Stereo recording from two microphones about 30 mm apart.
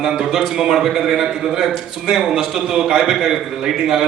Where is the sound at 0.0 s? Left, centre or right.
Right.